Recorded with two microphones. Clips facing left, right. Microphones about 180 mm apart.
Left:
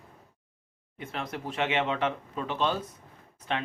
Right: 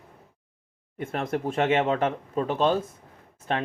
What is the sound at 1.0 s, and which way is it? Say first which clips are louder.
Speech: right 8 dB; 50° right (ahead or behind).